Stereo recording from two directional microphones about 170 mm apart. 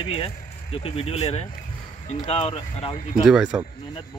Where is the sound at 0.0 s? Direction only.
30° left (ahead or behind).